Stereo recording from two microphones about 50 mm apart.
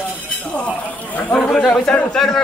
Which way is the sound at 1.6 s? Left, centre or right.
Centre.